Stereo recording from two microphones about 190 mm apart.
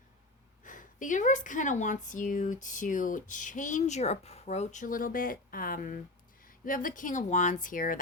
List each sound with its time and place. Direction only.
0.6 s speech: 45° left (ahead or behind)